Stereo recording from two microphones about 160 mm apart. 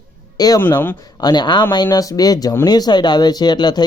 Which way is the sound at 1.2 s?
25° left (ahead or behind).